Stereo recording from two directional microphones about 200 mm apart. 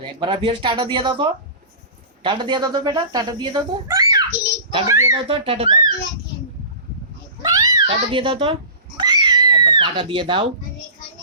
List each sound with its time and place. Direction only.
0.0 s speech: 25° right (ahead or behind)
5.3 s speech: 30° right (ahead or behind)
7.4 s cat: 20° right (ahead or behind)
9.0 s a sound: 20° right (ahead or behind)